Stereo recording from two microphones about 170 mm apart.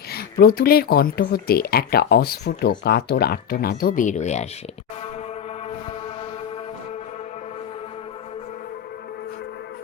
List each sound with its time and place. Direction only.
0.1 s speech: 70° left (ahead or behind); by 4.4 s 40° left (ahead or behind)